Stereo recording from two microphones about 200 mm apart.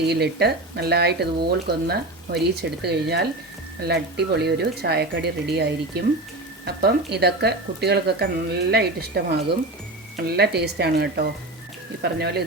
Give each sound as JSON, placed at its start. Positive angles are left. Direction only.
{"t": 0.1, "sound": "speech", "side_deg": -55}